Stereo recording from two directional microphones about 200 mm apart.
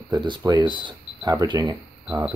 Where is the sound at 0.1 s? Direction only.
20° right (ahead or behind).